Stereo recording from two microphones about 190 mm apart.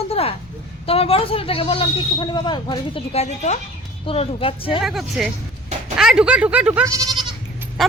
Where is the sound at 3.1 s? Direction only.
35° left (ahead or behind).